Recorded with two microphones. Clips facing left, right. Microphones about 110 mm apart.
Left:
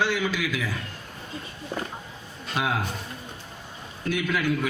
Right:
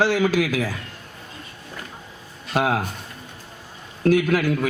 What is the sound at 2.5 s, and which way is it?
Speech, 45° right (ahead or behind).